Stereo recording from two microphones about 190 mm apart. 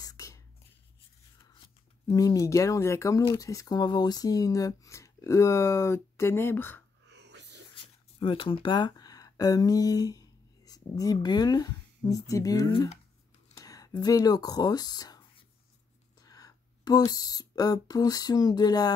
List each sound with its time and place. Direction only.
0.0 s whispering: 15° left (ahead or behind)
2.0 s speech: 20° left (ahead or behind)
7.1 s a sound: 65° right (ahead or behind)
8.2 s speech: 25° left (ahead or behind)
16.2 s speech: 20° left (ahead or behind)